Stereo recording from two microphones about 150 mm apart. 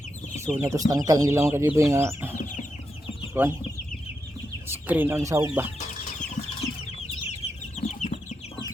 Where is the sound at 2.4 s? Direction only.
60° left (ahead or behind).